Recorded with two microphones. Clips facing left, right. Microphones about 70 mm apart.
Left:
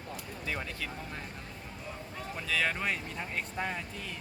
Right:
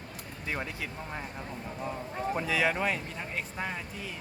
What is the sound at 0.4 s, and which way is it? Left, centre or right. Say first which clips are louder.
Speech: right 2 dB; centre.